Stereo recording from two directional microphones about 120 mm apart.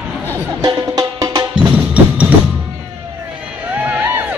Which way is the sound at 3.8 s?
15° right (ahead or behind).